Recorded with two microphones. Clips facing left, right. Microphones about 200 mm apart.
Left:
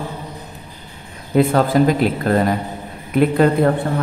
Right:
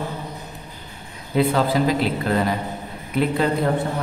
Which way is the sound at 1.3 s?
50° left (ahead or behind).